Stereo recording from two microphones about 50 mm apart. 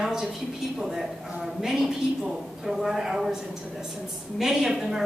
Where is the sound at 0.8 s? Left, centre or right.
Centre.